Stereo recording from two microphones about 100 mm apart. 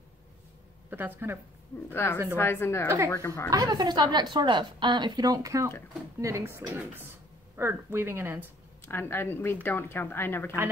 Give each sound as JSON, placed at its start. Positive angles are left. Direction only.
{"t": 0.8, "sound": "speech", "side_deg": -20}
{"t": 1.9, "sound": "speech", "side_deg": 20}
{"t": 3.4, "sound": "a woman's voice", "side_deg": -40}
{"t": 8.8, "sound": "speech", "side_deg": 20}